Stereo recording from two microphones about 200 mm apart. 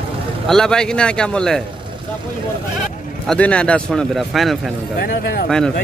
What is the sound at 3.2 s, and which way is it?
A man's voice, 5° left (ahead or behind).